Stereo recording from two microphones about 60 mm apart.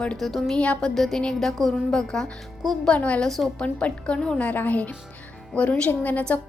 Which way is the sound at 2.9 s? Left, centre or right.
Left.